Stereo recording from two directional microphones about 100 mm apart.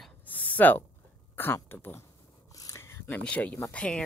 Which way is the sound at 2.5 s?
25° left (ahead or behind).